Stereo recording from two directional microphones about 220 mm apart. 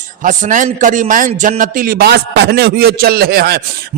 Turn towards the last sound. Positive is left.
turn(degrees=-45)  # may be behind; listen again after turning